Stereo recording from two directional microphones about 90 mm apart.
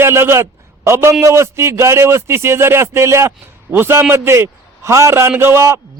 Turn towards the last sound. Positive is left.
turn(degrees=-30)  # may be behind; listen again after turning